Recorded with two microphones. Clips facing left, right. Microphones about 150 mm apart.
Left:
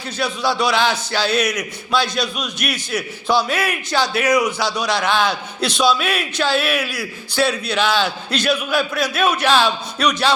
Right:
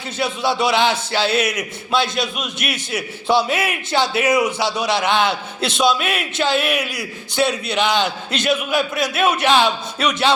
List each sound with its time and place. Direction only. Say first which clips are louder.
0.2 s a man's voice: even; 25° right (ahead or behind)